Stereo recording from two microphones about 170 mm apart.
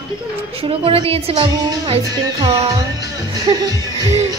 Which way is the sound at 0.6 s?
35° right (ahead or behind).